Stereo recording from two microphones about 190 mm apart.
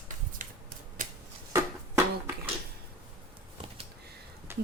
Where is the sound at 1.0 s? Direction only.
45° right (ahead or behind).